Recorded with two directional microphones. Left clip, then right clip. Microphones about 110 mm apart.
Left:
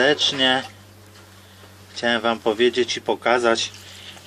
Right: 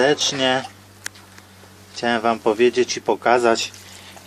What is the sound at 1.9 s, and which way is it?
Speech, 15° right (ahead or behind).